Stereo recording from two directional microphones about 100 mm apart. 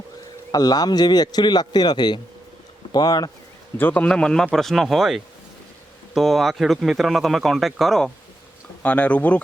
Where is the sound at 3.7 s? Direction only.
20° left (ahead or behind).